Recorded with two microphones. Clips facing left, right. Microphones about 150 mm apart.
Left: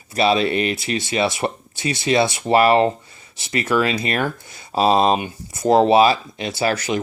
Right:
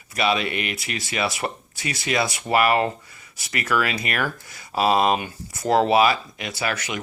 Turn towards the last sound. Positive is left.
turn(degrees=35)  # may be behind; listen again after turning